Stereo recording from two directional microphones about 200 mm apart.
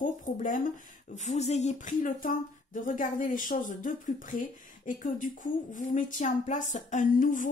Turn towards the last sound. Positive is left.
turn(degrees=40)  # may be behind; listen again after turning